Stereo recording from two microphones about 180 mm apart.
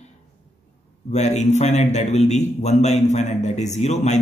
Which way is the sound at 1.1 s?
40° left (ahead or behind).